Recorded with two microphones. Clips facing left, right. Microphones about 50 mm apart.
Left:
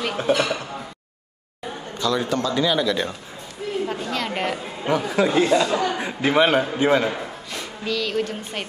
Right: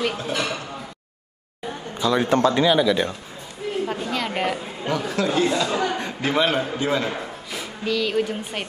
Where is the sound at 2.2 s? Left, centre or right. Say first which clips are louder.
Right 5 dB; right.